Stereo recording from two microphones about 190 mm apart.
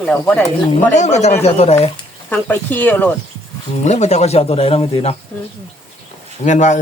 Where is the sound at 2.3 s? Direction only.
10° left (ahead or behind).